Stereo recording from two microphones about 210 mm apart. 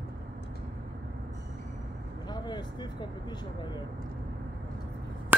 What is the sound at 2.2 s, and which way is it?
Speech, 20° left (ahead or behind).